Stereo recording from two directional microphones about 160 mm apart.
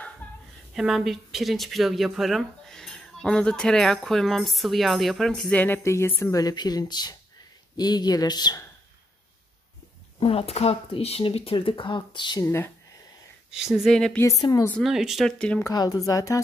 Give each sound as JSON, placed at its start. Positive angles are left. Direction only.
{"t": 0.2, "sound": "a sound", "side_deg": 10}
{"t": 0.7, "sound": "speech", "side_deg": 0}
{"t": 6.4, "sound": "speech", "side_deg": 25}
{"t": 10.2, "sound": "speech", "side_deg": 40}
{"t": 12.4, "sound": "speech", "side_deg": 15}
{"t": 13.6, "sound": "speech", "side_deg": -5}
{"t": 14.2, "sound": "speech", "side_deg": 20}
{"t": 14.8, "sound": "speech", "side_deg": 0}
{"t": 15.6, "sound": "speech", "side_deg": 25}